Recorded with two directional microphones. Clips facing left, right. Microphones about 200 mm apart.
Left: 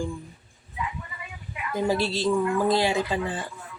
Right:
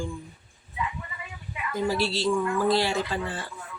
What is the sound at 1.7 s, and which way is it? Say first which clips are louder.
Speech: left 2 dB; 20° left (ahead or behind).